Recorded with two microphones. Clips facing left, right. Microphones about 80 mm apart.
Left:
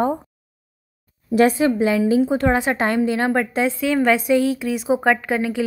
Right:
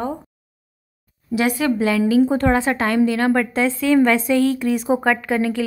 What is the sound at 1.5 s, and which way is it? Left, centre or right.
Speech, left.